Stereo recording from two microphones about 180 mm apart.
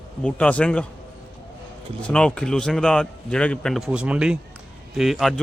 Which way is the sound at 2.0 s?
5° left (ahead or behind).